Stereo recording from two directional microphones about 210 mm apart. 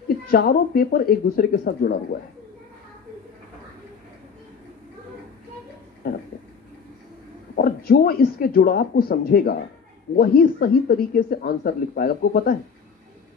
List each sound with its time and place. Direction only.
0.3 s speech: 45° left (ahead or behind)
6.0 s speech: 45° left (ahead or behind)
7.5 s speech: 45° left (ahead or behind)